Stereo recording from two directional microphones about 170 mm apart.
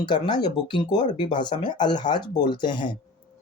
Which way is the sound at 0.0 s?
25° left (ahead or behind).